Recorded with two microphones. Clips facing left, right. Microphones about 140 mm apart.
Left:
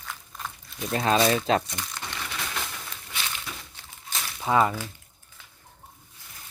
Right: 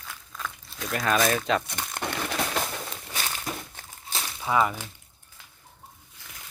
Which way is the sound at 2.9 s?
40° right (ahead or behind).